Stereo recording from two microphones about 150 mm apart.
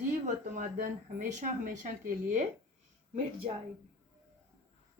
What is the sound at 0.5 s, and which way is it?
Speech, 65° right (ahead or behind).